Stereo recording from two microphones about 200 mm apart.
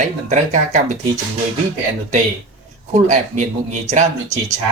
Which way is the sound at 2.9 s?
35° right (ahead or behind).